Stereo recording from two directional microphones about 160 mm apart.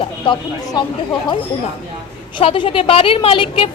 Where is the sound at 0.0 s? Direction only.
30° left (ahead or behind).